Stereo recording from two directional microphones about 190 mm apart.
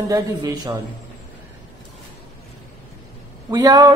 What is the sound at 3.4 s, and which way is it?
Speech, 20° right (ahead or behind).